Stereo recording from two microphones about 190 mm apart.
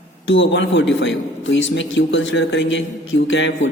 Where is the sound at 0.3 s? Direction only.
75° left (ahead or behind).